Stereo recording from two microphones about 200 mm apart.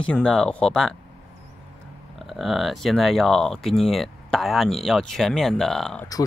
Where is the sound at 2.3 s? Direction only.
Centre (ahead or behind).